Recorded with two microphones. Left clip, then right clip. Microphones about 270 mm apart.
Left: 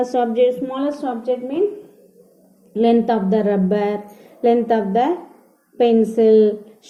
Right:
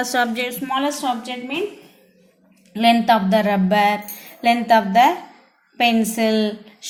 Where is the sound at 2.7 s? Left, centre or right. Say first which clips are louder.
Right 1 dB; right.